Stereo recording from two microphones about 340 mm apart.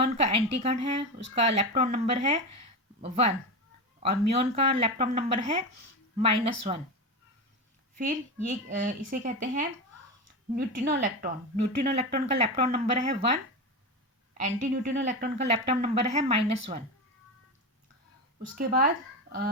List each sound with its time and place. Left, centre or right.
0.0 s speech: centre
8.8 s speech: right
18.5 s speech: right